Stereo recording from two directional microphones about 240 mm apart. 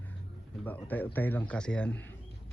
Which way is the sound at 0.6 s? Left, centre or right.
Centre.